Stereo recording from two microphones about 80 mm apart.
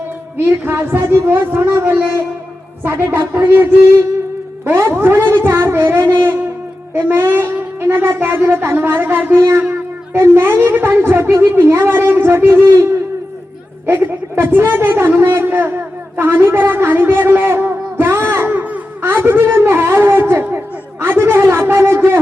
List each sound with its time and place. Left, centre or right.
0.3 s speech: right
9.4 s a sound: right
10.1 s speech: right
13.8 s a woman's voice: right